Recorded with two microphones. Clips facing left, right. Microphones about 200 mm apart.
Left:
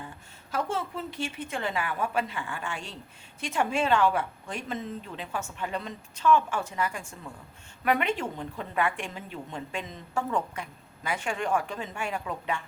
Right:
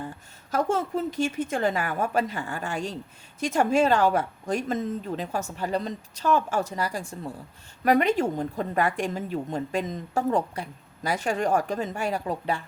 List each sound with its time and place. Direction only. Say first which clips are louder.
0.5 s a woman's voice: right 6 dB; 45° right (ahead or behind)